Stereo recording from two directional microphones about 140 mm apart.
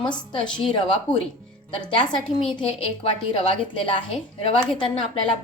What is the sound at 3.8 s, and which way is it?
A woman's voice, 40° left (ahead or behind).